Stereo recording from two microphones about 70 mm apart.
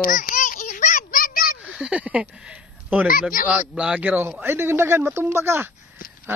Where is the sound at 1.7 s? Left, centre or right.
Centre.